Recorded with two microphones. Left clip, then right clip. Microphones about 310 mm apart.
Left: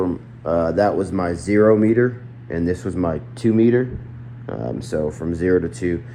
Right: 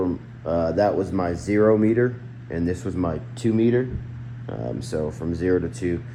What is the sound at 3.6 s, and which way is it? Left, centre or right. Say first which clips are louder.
Speech: left 4 dB; left.